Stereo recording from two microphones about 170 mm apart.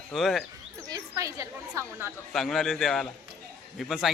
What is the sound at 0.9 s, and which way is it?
Chatter, 20° right (ahead or behind).